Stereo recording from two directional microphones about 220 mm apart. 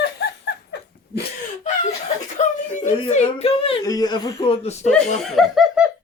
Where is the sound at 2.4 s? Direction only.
35° left (ahead or behind).